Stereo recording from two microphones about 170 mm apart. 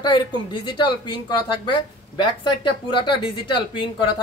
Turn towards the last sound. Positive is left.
turn(degrees=30)  # may be behind; listen again after turning